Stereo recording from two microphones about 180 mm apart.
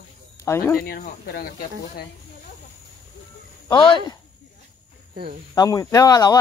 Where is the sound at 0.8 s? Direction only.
60° left (ahead or behind).